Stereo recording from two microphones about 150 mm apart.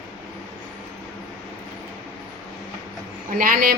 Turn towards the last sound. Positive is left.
turn(degrees=-70)  # may be behind; listen again after turning